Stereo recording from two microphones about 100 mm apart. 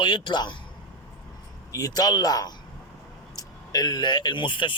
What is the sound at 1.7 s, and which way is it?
Speech, 35° left (ahead or behind).